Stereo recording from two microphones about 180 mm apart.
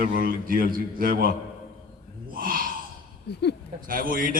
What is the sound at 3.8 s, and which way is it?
Speech, 50° right (ahead or behind).